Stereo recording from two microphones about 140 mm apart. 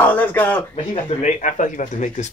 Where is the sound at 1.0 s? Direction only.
60° left (ahead or behind).